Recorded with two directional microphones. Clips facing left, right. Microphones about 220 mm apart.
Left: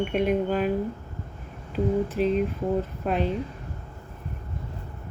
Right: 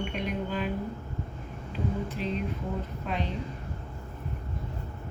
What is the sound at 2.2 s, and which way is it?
Speech, 45° left (ahead or behind).